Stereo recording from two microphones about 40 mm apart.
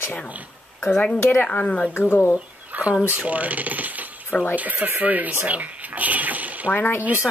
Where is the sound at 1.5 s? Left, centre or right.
Left.